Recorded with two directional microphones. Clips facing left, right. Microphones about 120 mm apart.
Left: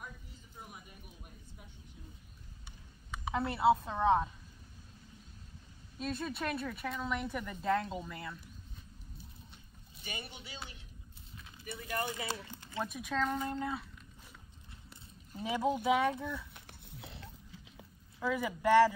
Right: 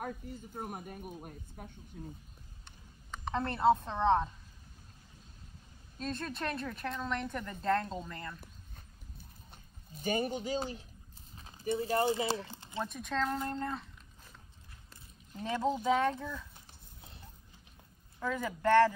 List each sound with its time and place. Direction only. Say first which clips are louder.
0.0 s speech: right 10 dB; 55° right (ahead or behind)
3.1 s a woman's voice: even; 5° left (ahead or behind)
5.9 s speech: even; 5° left (ahead or behind)
9.5 s a sound: right 4 dB; 45° right (ahead or behind)
11.3 s clip-clop: right 10 dB; 35° right (ahead or behind)
11.7 s speech: right 8 dB; 30° right (ahead or behind)
12.8 s speech: even; 5° left (ahead or behind)
15.3 s speech: even; 10° left (ahead or behind)
16.5 s a sound: left 5 dB; 75° left (ahead or behind); by 17.8 s 90° left
18.2 s speech: even; 10° left (ahead or behind)